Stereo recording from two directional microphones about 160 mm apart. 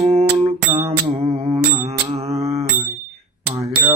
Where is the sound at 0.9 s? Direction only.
40° right (ahead or behind).